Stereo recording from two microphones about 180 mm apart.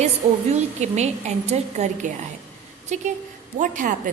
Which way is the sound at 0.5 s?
40° right (ahead or behind).